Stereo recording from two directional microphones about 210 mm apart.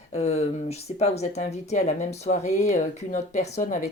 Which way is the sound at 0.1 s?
30° left (ahead or behind).